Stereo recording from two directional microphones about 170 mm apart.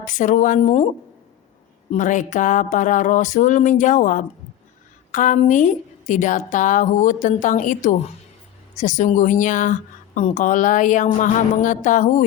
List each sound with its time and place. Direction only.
0.0 s a woman's voice: 50° left (ahead or behind)
1.9 s a woman's voice: 50° left (ahead or behind)